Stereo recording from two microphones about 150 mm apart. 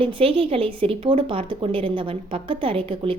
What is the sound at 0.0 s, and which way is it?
A woman's voice, 40° right (ahead or behind).